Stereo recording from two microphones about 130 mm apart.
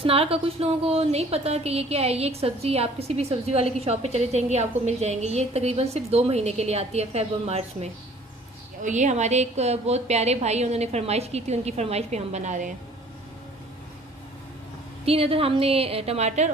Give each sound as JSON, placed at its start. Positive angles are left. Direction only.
{"t": 0.0, "sound": "a woman's voice", "side_deg": -45}
{"t": 8.8, "sound": "a woman's voice", "side_deg": -70}
{"t": 15.0, "sound": "a woman's voice", "side_deg": -45}